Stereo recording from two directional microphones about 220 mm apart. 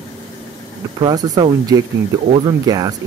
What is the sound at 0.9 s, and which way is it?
Speech, 15° right (ahead or behind).